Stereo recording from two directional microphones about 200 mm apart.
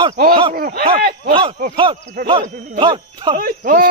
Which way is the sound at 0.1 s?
45° right (ahead or behind).